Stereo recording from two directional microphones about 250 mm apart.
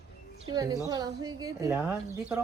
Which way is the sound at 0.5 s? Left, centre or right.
Centre.